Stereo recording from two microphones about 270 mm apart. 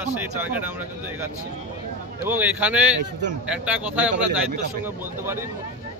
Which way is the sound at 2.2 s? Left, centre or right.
Centre.